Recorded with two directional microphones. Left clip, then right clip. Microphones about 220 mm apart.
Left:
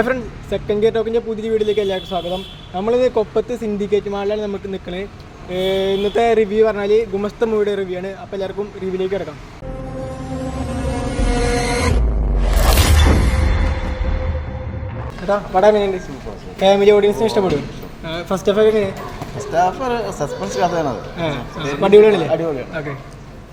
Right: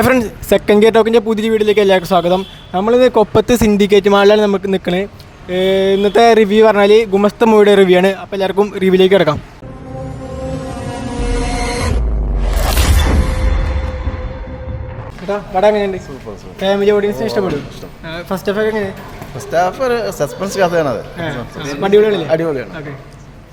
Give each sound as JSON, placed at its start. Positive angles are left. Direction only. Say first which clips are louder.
{"t": 0.0, "sound": "speech", "louder": "right 7 dB", "side_deg": -50}
{"t": 11.7, "sound": "music", "louder": "even", "side_deg": 0}
{"t": 15.3, "sound": "a man's voice", "louder": "right 1 dB", "side_deg": -20}
{"t": 16.6, "sound": "speech", "louder": "left 1 dB", "side_deg": -5}
{"t": 18.1, "sound": "speech", "louder": "left 1 dB", "side_deg": -20}
{"t": 19.4, "sound": "speech", "louder": "right 3 dB", "side_deg": -35}
{"t": 21.8, "sound": "a man's voice", "louder": "left 1 dB", "side_deg": -5}
{"t": 22.3, "sound": "speech", "louder": "right 4 dB", "side_deg": -45}